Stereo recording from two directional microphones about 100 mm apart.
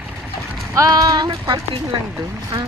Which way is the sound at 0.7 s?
35° right (ahead or behind).